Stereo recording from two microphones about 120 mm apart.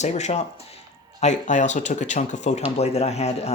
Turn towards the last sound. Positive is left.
turn(degrees=60)  # may be behind; listen again after turning